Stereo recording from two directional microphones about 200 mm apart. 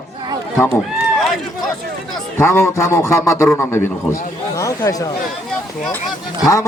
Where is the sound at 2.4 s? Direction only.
15° left (ahead or behind).